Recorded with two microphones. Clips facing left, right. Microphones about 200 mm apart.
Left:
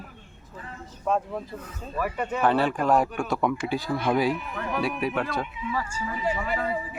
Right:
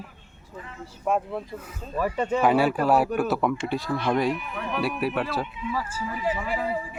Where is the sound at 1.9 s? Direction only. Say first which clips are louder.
Right 4 dB; 25° right (ahead or behind).